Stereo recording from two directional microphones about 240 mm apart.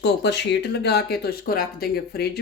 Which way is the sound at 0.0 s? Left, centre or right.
Left.